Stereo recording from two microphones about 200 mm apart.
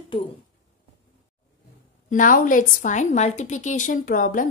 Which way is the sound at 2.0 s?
40° left (ahead or behind).